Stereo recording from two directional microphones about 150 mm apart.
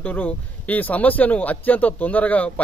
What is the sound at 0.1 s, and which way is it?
A man's voice, 10° left (ahead or behind).